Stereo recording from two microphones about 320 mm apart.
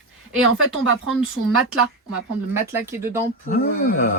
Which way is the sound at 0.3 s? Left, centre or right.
Right.